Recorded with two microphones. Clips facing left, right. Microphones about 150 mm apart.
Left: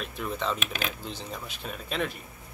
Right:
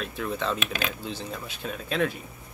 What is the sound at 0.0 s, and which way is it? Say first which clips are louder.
Speech: right 2 dB; centre (ahead or behind).